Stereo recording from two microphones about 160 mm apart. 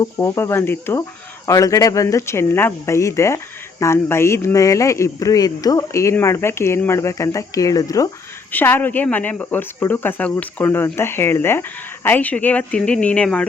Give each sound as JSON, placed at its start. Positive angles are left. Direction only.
{"t": 0.0, "sound": "speech", "side_deg": 15}